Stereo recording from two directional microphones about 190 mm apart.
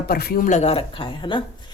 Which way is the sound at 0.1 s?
55° left (ahead or behind).